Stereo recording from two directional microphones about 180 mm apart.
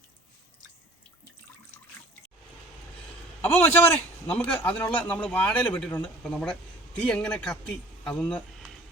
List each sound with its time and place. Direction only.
3.4 s a man's voice: 10° left (ahead or behind)